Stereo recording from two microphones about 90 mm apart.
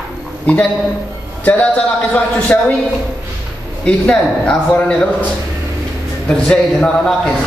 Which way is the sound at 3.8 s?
10° left (ahead or behind).